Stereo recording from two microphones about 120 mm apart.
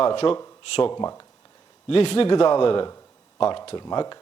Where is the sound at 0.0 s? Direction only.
45° left (ahead or behind).